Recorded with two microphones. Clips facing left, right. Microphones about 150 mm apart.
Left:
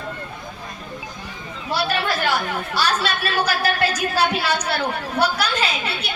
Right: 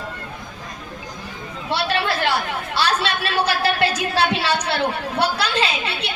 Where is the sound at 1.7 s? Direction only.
25° right (ahead or behind).